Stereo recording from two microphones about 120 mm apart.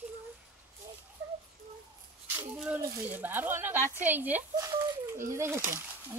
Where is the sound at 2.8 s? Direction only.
20° right (ahead or behind).